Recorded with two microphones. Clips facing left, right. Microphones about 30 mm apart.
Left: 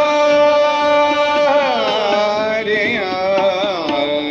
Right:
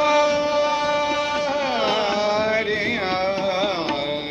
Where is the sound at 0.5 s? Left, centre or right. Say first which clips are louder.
Left 7 dB; left.